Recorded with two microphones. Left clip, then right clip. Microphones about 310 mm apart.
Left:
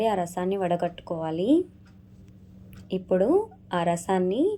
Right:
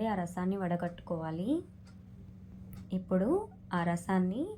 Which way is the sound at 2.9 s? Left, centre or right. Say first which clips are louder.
Left 9 dB; left.